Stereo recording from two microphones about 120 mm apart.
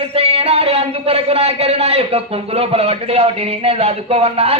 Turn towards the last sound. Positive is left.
turn(degrees=-55)  # may be behind; listen again after turning